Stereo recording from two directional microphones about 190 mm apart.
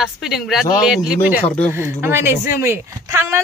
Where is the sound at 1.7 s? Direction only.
10° right (ahead or behind).